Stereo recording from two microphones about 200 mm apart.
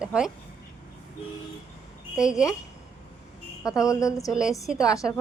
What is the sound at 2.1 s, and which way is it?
Speech, 5° right (ahead or behind).